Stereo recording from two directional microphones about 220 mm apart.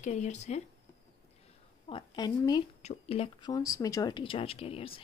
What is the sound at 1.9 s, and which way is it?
Speech, 20° left (ahead or behind).